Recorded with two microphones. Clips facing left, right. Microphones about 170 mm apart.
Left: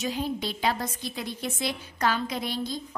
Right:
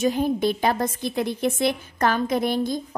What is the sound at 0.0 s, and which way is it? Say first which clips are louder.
A woman's voice: right 9 dB; 50° right (ahead or behind).